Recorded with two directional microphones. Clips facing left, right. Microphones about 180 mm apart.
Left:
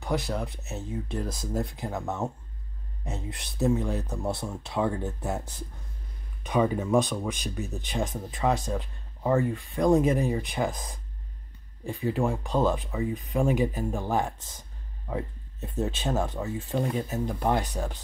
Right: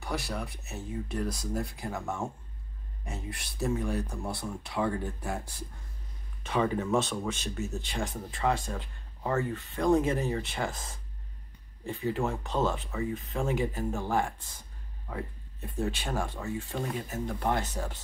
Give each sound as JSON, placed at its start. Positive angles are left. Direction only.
{"t": 0.0, "sound": "speech", "side_deg": 20}
{"t": 15.6, "sound": "speech", "side_deg": 25}